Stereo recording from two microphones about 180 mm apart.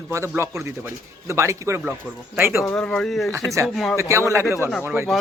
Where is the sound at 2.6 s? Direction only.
5° left (ahead or behind).